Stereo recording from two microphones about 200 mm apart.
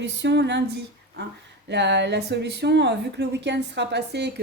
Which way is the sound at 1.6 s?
60° right (ahead or behind).